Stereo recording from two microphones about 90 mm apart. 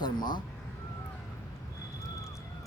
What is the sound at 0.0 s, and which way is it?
Cat, 55° left (ahead or behind).